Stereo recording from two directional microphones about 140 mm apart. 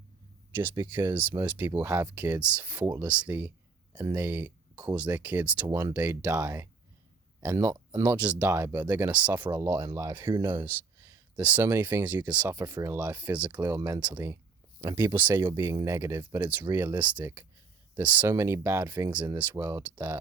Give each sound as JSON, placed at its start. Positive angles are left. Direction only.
{"t": 0.9, "sound": "speech", "side_deg": -15}
{"t": 5.6, "sound": "speech", "side_deg": -25}
{"t": 5.9, "sound": "speech", "side_deg": -10}
{"t": 6.3, "sound": "speech", "side_deg": -20}
{"t": 8.1, "sound": "speech", "side_deg": -10}
{"t": 13.7, "sound": "speech", "side_deg": -20}